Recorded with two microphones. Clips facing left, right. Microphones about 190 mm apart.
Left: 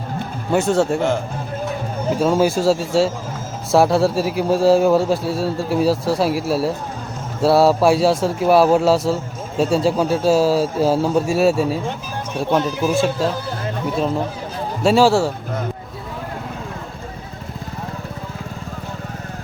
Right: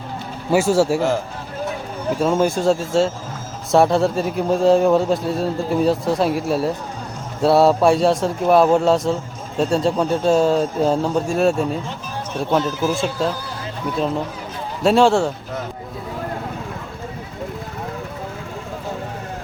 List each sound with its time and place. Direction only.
0.5 s a man's voice: 5° right (ahead or behind)
12.9 s a man's voice: centre (ahead or behind)
14.8 s a man's voice: 5° left (ahead or behind)